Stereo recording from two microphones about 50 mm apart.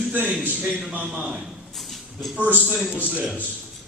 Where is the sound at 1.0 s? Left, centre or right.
Centre.